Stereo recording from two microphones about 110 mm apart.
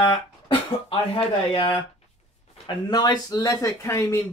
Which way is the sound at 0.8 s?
50° left (ahead or behind).